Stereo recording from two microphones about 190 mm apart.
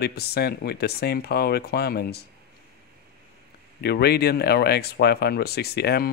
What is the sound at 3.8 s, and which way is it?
Speech, 55° left (ahead or behind).